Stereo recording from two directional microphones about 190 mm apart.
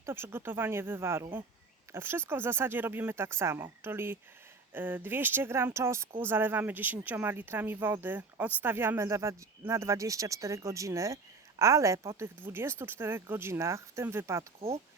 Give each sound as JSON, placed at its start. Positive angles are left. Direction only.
{"t": 0.0, "sound": "speech", "side_deg": -15}